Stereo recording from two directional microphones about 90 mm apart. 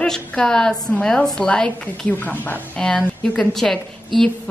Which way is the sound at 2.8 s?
5° left (ahead or behind).